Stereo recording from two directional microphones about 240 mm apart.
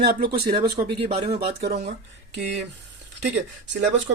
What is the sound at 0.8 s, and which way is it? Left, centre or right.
Speech, right.